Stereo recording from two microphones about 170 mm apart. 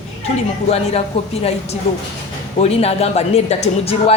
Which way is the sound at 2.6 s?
35° left (ahead or behind).